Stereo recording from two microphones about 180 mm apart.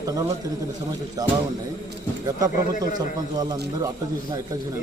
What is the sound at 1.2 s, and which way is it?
Speech, 20° right (ahead or behind).